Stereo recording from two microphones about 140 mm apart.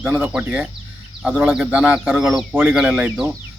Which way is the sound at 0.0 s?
15° right (ahead or behind).